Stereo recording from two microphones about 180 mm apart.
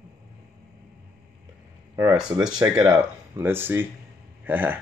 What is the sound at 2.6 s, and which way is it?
Speech, 20° right (ahead or behind).